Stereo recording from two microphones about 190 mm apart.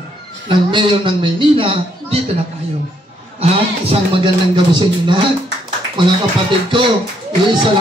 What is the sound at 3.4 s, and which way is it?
Music, 30° right (ahead or behind).